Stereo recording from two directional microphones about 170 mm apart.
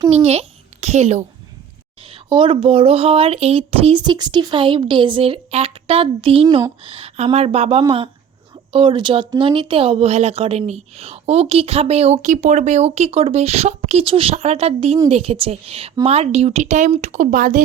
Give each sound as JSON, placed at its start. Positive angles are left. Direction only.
{"t": 0.1, "sound": "a child's voice", "side_deg": -40}